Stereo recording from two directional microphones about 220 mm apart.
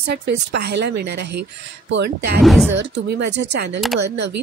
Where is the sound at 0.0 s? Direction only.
50° right (ahead or behind).